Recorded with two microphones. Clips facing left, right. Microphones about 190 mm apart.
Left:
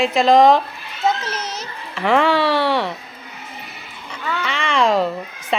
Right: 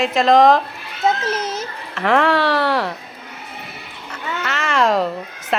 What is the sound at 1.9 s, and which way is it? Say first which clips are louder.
Speech: even; centre (ahead or behind).